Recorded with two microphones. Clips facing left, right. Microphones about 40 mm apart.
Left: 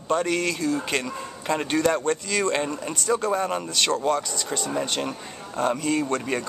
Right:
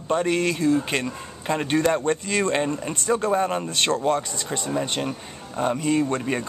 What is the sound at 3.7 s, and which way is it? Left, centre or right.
Speech, right.